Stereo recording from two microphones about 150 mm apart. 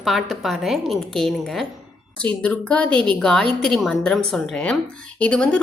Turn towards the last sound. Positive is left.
turn(degrees=5)  # may be behind; listen again after turning